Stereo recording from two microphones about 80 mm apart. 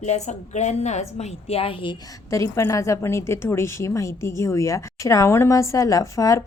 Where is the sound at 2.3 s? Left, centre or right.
Left.